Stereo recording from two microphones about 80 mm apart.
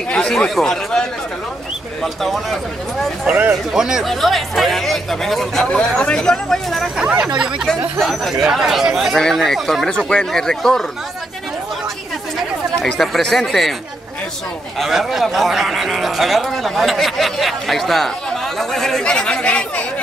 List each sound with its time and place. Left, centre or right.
0.1 s speech: centre
2.2 s speech: centre
3.3 s a man's voice: right
3.7 s speech: centre
5.7 s speech: centre
7.0 s speech: centre
8.0 s speech: centre
13.0 s speech: centre
14.8 s speech: centre